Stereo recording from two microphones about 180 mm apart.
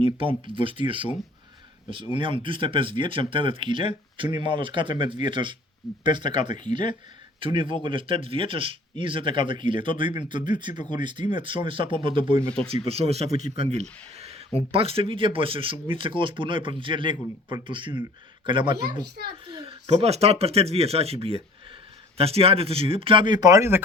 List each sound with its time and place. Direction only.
0.0 s speech: 30° right (ahead or behind)
5.8 s speech: centre (ahead or behind)
6.2 s speech: 40° left (ahead or behind)
7.3 s speech: 30° right (ahead or behind)
12.4 s speech: 5° left (ahead or behind)
12.9 s speech: 35° right (ahead or behind)
19.0 s a child's voice: 65° right (ahead or behind)
19.5 s speech: 30° right (ahead or behind); by 23.8 s 15° right (ahead or behind)